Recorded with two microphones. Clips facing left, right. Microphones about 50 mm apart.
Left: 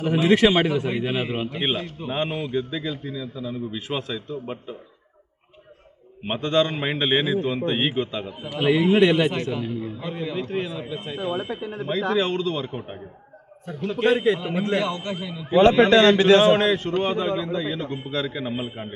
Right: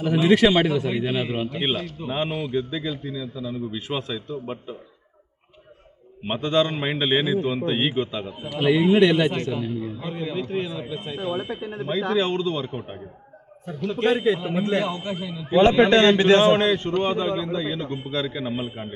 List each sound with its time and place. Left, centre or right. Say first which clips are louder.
0.0 s speech: even; centre
2.0 s a man's voice: even; centre
6.2 s a man's voice: even; centre
15.9 s a man's voice: left 1 dB; centre
16.5 s a man's voice: even; centre